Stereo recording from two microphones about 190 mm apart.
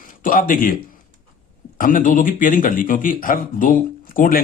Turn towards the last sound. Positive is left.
turn(degrees=45)  # may be behind; listen again after turning